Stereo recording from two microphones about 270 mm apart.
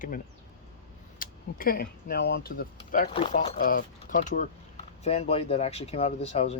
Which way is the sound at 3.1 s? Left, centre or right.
Centre.